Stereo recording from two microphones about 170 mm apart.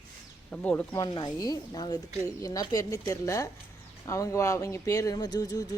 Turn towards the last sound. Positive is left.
turn(degrees=20)  # may be behind; listen again after turning